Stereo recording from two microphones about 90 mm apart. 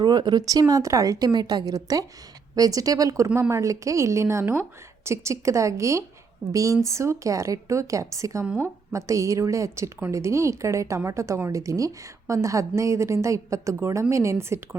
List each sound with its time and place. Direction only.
0.0 s a woman's voice: 55° right (ahead or behind); by 14.8 s 30° right (ahead or behind)